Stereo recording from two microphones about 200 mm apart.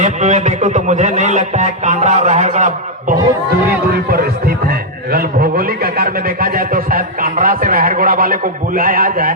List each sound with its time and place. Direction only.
0.0 s a man's voice: 35° right (ahead or behind)